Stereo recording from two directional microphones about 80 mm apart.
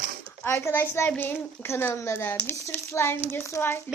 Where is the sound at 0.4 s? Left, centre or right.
Left.